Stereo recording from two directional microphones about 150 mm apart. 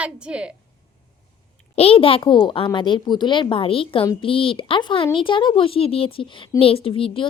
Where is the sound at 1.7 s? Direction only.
40° left (ahead or behind).